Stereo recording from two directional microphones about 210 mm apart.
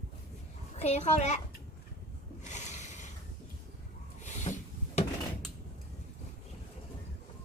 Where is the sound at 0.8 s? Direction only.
30° left (ahead or behind).